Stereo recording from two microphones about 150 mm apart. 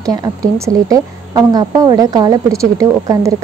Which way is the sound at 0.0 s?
25° right (ahead or behind).